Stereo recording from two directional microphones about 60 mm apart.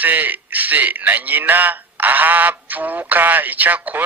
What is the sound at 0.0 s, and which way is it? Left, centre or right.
A man's voice, right.